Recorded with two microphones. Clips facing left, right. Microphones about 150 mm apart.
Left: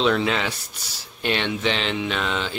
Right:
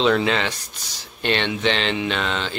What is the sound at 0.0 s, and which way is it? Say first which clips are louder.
Speech: right 2 dB; centre (ahead or behind).